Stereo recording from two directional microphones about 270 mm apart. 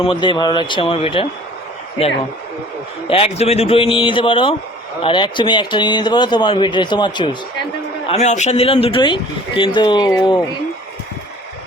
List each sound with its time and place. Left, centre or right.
0.0 s speech: centre
3.1 s speech: left